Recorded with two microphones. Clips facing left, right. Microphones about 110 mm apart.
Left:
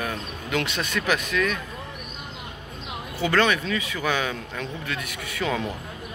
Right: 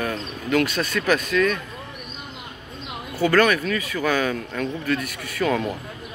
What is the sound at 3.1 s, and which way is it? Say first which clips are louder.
Speech: right 4 dB; 20° left (ahead or behind).